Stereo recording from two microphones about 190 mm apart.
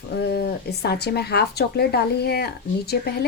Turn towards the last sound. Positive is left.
turn(degrees=55)  # may be behind; listen again after turning